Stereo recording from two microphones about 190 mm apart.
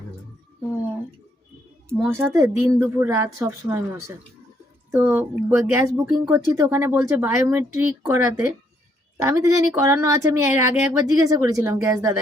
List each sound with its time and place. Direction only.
2.0 s speech: 10° right (ahead or behind)
4.9 s speech: 15° right (ahead or behind)